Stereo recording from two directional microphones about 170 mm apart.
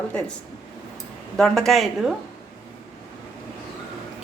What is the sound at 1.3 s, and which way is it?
Speech, centre (ahead or behind).